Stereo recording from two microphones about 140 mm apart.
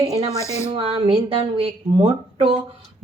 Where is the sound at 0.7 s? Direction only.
40° right (ahead or behind).